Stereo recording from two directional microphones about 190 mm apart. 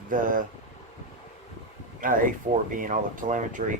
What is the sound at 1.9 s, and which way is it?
Speech, 45° right (ahead or behind).